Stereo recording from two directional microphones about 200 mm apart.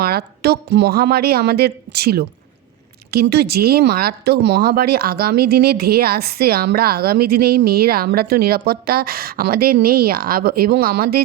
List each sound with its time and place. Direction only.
0.0 s speech: 50° right (ahead or behind)